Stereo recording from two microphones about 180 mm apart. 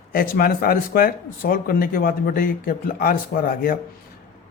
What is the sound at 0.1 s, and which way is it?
Speech, 55° left (ahead or behind).